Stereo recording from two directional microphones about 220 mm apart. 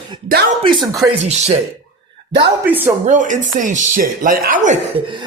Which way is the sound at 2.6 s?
10° right (ahead or behind).